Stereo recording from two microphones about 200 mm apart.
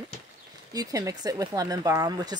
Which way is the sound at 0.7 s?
15° right (ahead or behind).